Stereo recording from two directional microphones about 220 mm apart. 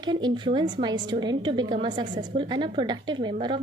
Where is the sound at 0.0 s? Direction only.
20° right (ahead or behind).